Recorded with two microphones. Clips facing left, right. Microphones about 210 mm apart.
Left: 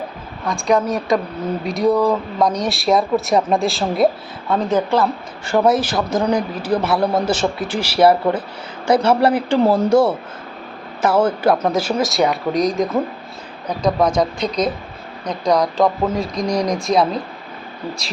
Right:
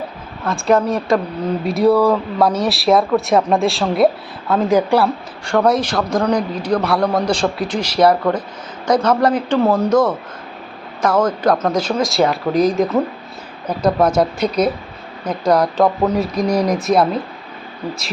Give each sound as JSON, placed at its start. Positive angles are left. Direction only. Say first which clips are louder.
{"t": 0.5, "sound": "speech", "louder": "right 2 dB", "side_deg": 0}
{"t": 1.9, "sound": "a man's voice", "louder": "right 2 dB", "side_deg": 15}
{"t": 2.4, "sound": "speech", "louder": "right 2 dB", "side_deg": -5}
{"t": 5.5, "sound": "a man's voice", "louder": "even", "side_deg": 5}